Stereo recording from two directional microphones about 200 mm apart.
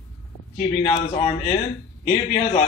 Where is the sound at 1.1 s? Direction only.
30° left (ahead or behind).